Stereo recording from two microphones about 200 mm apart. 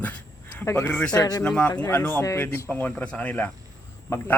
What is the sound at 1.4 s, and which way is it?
A man's voice, 5° left (ahead or behind).